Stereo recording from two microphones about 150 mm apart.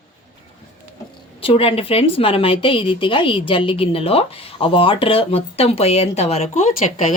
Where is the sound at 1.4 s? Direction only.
40° left (ahead or behind).